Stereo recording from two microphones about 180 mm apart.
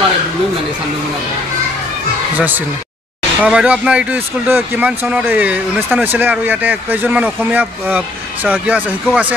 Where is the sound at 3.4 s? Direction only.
5° right (ahead or behind).